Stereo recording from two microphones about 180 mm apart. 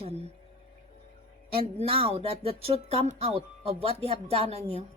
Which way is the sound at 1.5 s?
30° right (ahead or behind).